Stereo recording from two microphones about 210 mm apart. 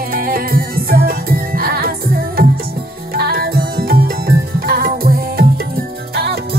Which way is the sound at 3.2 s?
45° right (ahead or behind).